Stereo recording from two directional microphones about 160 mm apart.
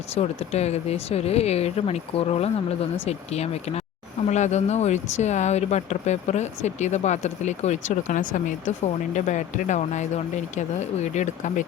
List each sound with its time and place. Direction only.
0.2 s speech: 40° left (ahead or behind)